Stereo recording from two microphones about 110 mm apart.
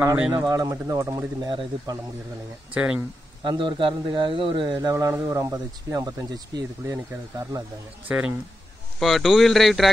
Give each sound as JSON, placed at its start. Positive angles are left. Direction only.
{"t": 0.3, "sound": "speech", "side_deg": -35}
{"t": 1.4, "sound": "a man's voice", "side_deg": -45}
{"t": 2.7, "sound": "speech", "side_deg": -10}
{"t": 3.4, "sound": "a man's voice", "side_deg": -50}
{"t": 4.9, "sound": "speech", "side_deg": -30}
{"t": 8.1, "sound": "speech", "side_deg": -10}
{"t": 9.0, "sound": "speech", "side_deg": 0}